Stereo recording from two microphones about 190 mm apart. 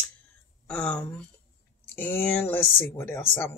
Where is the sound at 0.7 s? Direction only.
5° left (ahead or behind).